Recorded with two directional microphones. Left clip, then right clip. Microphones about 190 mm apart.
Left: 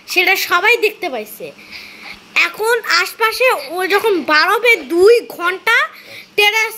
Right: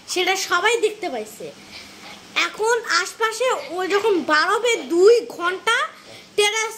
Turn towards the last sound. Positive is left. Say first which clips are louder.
# left 7 dB
turn(degrees=10)  # may be behind; listen again after turning